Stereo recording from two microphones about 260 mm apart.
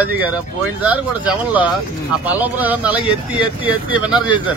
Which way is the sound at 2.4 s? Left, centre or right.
Centre.